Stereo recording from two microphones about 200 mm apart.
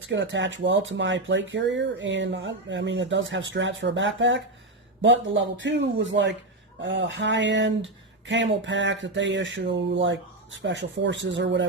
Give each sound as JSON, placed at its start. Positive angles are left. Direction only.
{"t": 0.1, "sound": "speech", "side_deg": -65}